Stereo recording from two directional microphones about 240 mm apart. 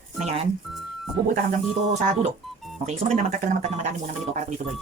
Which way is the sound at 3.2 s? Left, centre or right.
Right.